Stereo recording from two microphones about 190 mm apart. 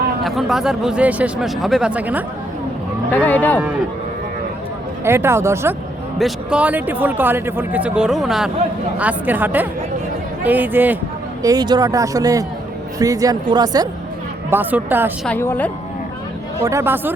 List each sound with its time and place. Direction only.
0.2 s speech: centre (ahead or behind)
3.1 s speech: 10° left (ahead or behind)
5.0 s a man's voice: 15° right (ahead or behind)
6.1 s a man's voice: centre (ahead or behind)
11.4 s speech: 20° right (ahead or behind)
14.5 s a man's voice: 10° right (ahead or behind)
15.3 s speech: 10° left (ahead or behind)
16.6 s a man's voice: 15° right (ahead or behind)